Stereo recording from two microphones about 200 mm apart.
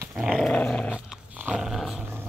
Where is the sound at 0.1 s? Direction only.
5° right (ahead or behind).